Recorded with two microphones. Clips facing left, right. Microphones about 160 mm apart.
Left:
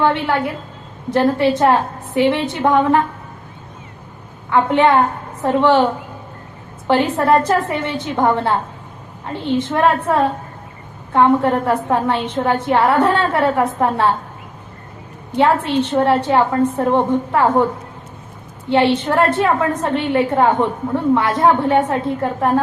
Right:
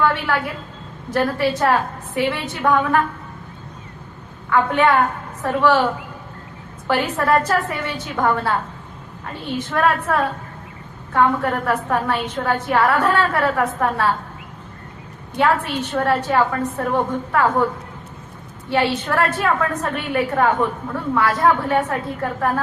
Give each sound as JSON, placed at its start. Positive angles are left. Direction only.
{"t": 0.0, "sound": "a woman's voice", "side_deg": 25}
{"t": 4.4, "sound": "a woman's voice", "side_deg": 25}
{"t": 15.4, "sound": "a woman's voice", "side_deg": 25}
{"t": 18.7, "sound": "a woman's voice", "side_deg": 25}